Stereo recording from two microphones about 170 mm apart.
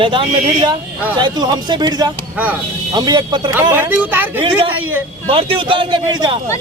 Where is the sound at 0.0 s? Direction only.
30° right (ahead or behind).